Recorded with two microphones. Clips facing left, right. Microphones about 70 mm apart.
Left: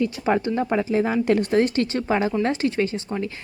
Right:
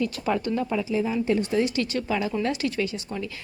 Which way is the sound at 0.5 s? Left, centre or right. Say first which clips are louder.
Left 4 dB; left.